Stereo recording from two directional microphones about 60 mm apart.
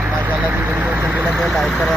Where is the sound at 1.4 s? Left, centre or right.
Centre.